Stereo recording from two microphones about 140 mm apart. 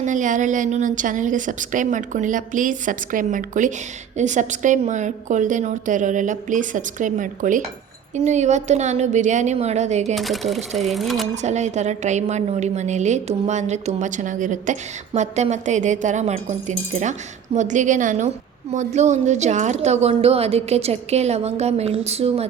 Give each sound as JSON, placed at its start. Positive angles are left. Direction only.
{"t": 0.0, "sound": "a woman's voice", "side_deg": -65}
{"t": 8.1, "sound": "a woman's voice", "side_deg": -55}
{"t": 10.2, "sound": "speech", "side_deg": 0}
{"t": 11.4, "sound": "a woman's voice", "side_deg": -55}